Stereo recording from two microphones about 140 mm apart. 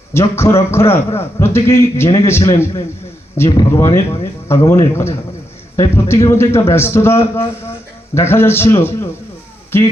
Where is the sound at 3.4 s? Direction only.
30° left (ahead or behind).